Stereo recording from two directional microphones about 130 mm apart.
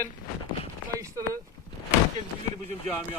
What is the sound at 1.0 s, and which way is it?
Speech, 25° right (ahead or behind).